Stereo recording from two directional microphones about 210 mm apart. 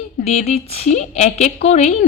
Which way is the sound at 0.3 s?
30° left (ahead or behind).